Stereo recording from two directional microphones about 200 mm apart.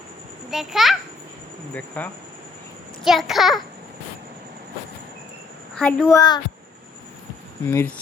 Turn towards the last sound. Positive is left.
turn(degrees=10)  # may be behind; listen again after turning